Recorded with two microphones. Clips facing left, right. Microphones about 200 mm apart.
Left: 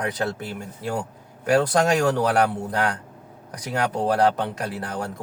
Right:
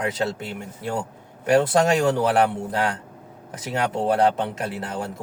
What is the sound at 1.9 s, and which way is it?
Speech, 25° right (ahead or behind).